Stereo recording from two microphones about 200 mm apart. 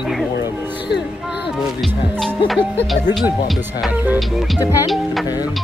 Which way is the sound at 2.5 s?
Centre (ahead or behind).